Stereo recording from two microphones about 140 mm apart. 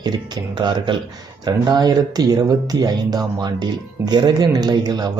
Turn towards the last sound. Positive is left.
turn(degrees=-30)  # may be behind; listen again after turning